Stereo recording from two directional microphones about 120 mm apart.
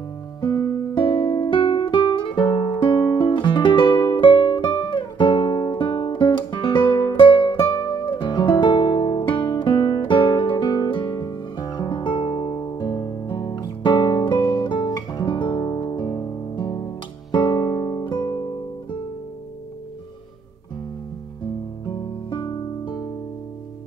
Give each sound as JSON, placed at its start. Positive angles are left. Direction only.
{"t": 0.4, "sound": "music", "side_deg": 35}
{"t": 4.2, "sound": "guitar", "side_deg": 40}
{"t": 7.2, "sound": "music", "side_deg": 40}
{"t": 14.6, "sound": "guitar", "side_deg": 40}
{"t": 15.0, "sound": "music", "side_deg": 40}
{"t": 21.8, "sound": "music", "side_deg": 40}